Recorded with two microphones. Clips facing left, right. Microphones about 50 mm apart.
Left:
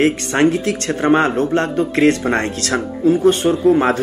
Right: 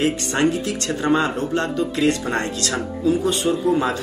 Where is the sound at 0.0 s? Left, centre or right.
Left.